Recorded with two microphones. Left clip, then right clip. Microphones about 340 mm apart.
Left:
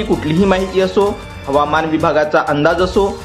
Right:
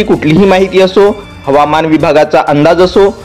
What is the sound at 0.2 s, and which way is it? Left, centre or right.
A man's voice, right.